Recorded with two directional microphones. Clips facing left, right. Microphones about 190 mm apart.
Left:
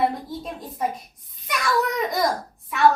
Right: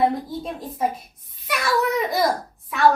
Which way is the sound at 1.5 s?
5° right (ahead or behind).